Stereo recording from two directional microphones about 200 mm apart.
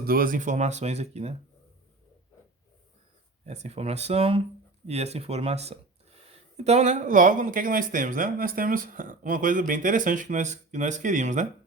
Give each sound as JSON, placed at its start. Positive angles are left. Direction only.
{"t": 0.0, "sound": "speech", "side_deg": -45}
{"t": 3.4, "sound": "speech", "side_deg": -35}